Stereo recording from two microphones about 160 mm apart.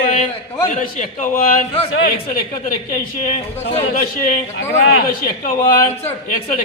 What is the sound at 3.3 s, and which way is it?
Speech, 40° left (ahead or behind).